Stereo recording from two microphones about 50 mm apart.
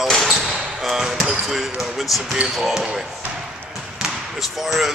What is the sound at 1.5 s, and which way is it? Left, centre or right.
Speech, centre.